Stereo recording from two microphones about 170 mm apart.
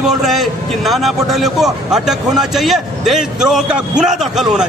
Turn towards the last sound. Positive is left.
turn(degrees=0)  # may be behind; listen again after turning